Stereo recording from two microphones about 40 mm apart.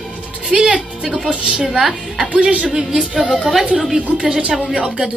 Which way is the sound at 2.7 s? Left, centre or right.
Centre.